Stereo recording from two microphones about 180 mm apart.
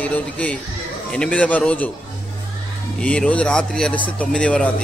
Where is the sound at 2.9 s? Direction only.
5° left (ahead or behind).